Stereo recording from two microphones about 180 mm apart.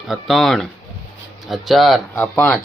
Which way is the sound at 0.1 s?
Centre (ahead or behind).